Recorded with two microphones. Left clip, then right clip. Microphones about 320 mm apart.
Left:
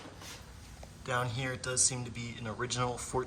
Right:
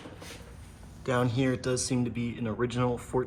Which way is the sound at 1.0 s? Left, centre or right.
Centre.